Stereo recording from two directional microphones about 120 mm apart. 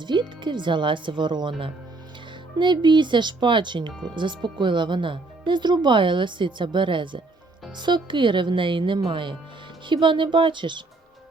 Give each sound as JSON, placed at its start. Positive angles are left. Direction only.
{"t": 0.0, "sound": "speech", "side_deg": -40}